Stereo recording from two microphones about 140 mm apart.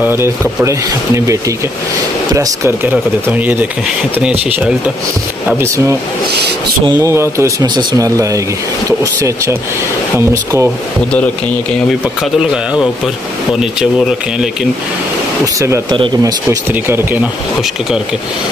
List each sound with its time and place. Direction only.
0.0 s speech: 15° right (ahead or behind)
6.9 s speech: 20° right (ahead or behind)
12.2 s speech: 5° right (ahead or behind)
15.4 s speech: 20° right (ahead or behind)
15.9 s speech: 30° right (ahead or behind)